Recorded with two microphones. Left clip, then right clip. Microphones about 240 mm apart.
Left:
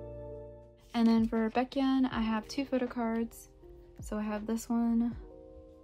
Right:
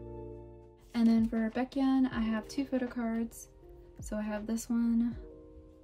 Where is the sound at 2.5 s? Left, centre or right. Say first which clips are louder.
Left 1 dB; centre.